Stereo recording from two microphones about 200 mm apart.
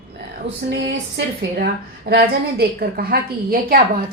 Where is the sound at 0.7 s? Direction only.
60° right (ahead or behind).